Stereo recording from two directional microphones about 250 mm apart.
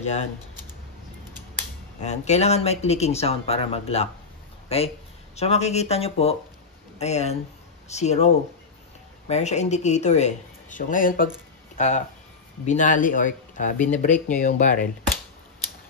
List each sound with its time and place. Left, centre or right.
0.0 s speech: left
2.0 s speech: left
9.3 s speech: left